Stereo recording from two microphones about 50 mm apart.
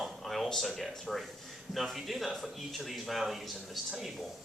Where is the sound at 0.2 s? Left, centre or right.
Centre.